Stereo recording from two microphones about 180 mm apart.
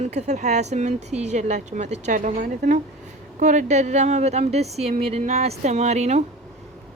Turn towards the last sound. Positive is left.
turn(degrees=-40)  # may be behind; listen again after turning